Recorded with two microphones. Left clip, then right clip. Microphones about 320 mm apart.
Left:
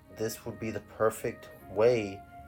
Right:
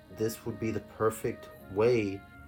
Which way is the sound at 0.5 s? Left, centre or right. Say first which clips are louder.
Right 2 dB; left.